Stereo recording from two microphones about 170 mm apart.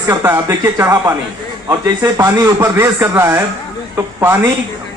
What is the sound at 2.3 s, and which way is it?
A man's voice, 15° right (ahead or behind).